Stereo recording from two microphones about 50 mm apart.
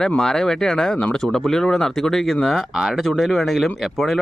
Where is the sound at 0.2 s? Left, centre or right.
Centre.